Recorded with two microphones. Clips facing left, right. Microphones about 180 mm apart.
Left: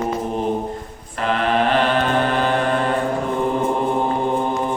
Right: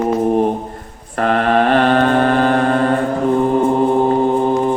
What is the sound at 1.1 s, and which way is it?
Speech, 50° right (ahead or behind).